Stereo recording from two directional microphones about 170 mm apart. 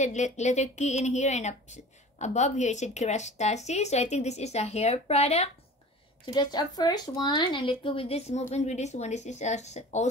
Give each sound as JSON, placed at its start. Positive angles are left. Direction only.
{"t": 0.0, "sound": "speech", "side_deg": 45}
{"t": 6.2, "sound": "speech", "side_deg": 25}